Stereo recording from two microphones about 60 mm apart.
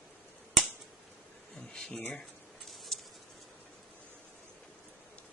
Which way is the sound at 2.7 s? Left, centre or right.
Centre.